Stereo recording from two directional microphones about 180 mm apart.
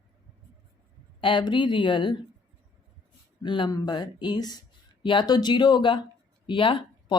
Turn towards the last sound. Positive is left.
turn(degrees=30)  # may be behind; listen again after turning